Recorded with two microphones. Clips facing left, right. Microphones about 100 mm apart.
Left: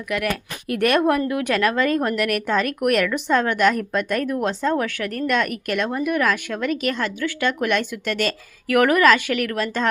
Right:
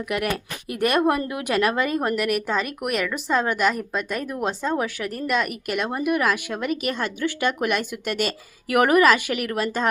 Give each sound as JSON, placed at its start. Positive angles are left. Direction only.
{"t": 0.1, "sound": "speech", "side_deg": -20}
{"t": 0.9, "sound": "a woman's voice", "side_deg": -5}